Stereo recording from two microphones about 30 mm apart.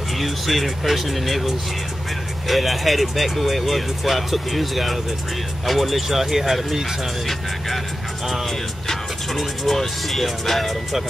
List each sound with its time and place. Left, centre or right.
0.2 s speech: centre
2.4 s speech: centre
9.8 s speech: centre